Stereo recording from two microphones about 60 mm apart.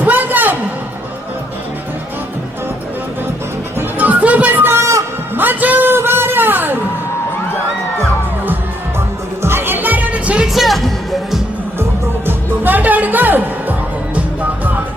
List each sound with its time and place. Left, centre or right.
0.0 s a sound: right
3.8 s music: right
4.6 s a sound: right
5.3 s music: right
9.4 s music: right
10.4 s music: centre
11.8 s music: right